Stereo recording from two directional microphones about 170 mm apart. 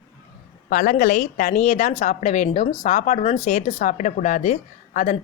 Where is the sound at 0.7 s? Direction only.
55° left (ahead or behind).